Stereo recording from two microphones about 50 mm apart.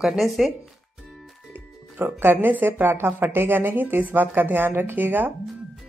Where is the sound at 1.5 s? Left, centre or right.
Right.